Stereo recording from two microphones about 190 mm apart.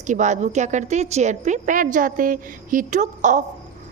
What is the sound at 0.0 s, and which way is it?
A woman's voice, 40° right (ahead or behind).